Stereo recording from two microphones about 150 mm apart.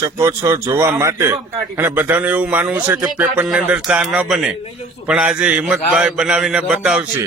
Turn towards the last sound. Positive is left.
turn(degrees=-5)  # may be behind; listen again after turning